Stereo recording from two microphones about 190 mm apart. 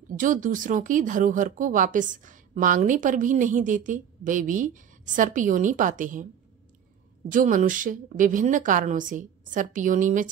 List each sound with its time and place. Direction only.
0.2 s speech: 45° right (ahead or behind)
7.2 s speech: 45° right (ahead or behind)